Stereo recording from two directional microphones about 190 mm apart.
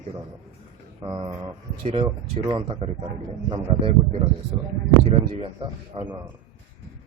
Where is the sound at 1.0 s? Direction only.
20° right (ahead or behind).